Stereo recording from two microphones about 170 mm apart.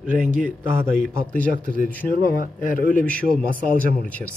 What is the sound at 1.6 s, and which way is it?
Speech, 55° left (ahead or behind).